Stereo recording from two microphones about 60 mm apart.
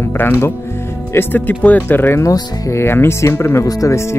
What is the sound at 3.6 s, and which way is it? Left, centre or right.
Speech, left.